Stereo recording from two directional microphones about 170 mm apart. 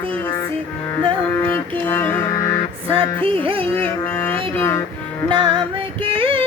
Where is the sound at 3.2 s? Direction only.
30° right (ahead or behind).